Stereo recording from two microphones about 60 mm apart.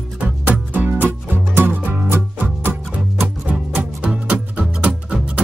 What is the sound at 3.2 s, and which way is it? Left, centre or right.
Music, right.